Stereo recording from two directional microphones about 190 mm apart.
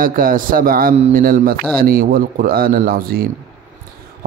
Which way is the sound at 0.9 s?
35° right (ahead or behind).